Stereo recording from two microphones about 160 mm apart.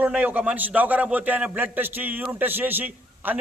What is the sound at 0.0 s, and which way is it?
A man's voice, 10° right (ahead or behind).